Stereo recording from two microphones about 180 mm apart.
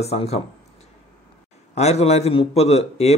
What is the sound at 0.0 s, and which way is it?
Speech, 35° left (ahead or behind).